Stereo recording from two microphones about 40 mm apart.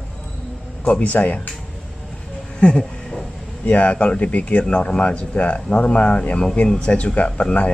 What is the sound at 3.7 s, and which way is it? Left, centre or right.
Speech, left.